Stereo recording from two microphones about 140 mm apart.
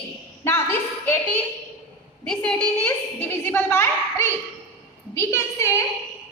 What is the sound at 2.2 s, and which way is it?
A woman's voice, 10° left (ahead or behind).